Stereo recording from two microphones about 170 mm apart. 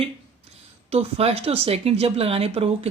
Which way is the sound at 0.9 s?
35° right (ahead or behind).